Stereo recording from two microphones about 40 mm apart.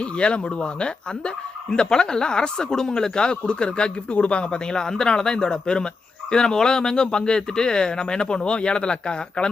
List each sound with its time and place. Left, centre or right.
0.0 s speech: left